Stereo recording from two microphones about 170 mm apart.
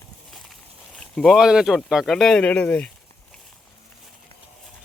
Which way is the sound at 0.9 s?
Centre (ahead or behind).